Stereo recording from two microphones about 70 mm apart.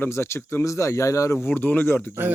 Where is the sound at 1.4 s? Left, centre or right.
Left.